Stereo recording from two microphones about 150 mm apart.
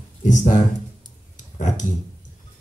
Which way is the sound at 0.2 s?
55° left (ahead or behind).